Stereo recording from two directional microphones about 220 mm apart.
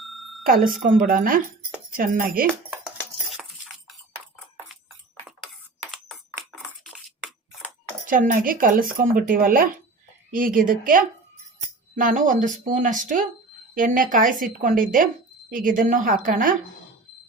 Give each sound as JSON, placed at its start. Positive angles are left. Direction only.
{"t": 0.0, "sound": "smoke detector", "side_deg": 0}
{"t": 0.4, "sound": "speech", "side_deg": -40}
{"t": 3.3, "sound": "cutlery", "side_deg": 0}
{"t": 8.0, "sound": "speech", "side_deg": -40}